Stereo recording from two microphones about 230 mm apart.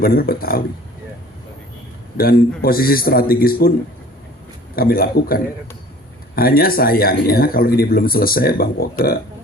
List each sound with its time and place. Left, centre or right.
0.0 s speech: left
2.1 s speech: left
4.7 s speech: left